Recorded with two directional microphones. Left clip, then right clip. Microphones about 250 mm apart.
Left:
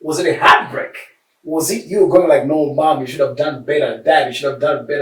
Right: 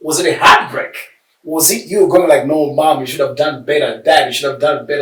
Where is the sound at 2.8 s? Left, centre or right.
Centre.